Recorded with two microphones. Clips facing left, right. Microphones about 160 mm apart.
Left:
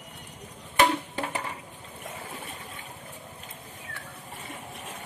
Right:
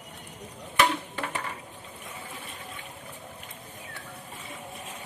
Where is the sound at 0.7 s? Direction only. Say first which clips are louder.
Left 2 dB; 35° left (ahead or behind).